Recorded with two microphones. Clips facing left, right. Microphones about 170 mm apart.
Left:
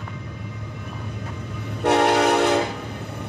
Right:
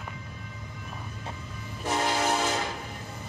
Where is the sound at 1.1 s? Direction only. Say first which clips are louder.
Left 7 dB; 70° left (ahead or behind).